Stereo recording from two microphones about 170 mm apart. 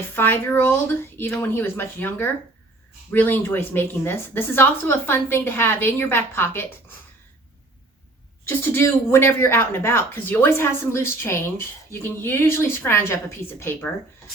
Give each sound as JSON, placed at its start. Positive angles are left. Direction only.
{"t": 0.2, "sound": "speech", "side_deg": 10}
{"t": 8.4, "sound": "speech", "side_deg": 15}